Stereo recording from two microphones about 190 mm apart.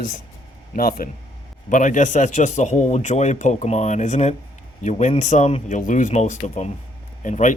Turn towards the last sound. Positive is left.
turn(degrees=40)  # may be behind; listen again after turning